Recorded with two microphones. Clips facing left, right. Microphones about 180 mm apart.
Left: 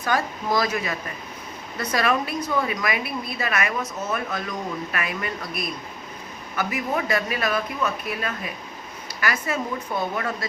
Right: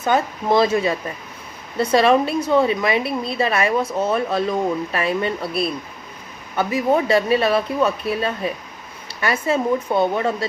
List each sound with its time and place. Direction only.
0.0 s a woman's voice: 25° right (ahead or behind)